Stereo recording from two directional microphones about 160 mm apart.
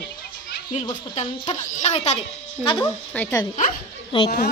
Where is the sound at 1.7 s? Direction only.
45° left (ahead or behind).